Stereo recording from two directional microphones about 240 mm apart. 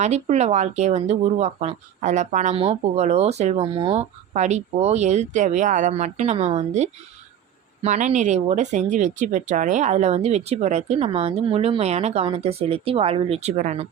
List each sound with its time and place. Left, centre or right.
0.0 s speech: right